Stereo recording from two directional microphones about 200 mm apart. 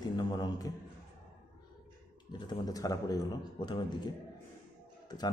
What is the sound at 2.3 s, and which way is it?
A man's voice, 20° left (ahead or behind).